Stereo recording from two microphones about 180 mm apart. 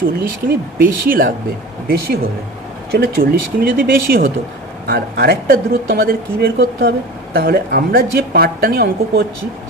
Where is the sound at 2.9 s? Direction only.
60° right (ahead or behind).